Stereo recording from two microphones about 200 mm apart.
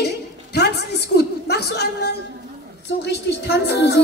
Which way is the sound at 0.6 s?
55° left (ahead or behind).